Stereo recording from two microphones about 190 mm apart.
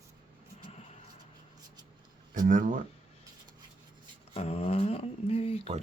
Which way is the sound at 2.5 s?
45° right (ahead or behind).